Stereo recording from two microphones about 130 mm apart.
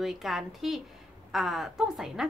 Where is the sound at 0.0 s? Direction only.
Centre (ahead or behind).